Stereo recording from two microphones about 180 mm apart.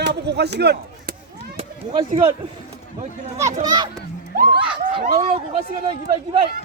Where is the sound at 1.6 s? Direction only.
30° right (ahead or behind).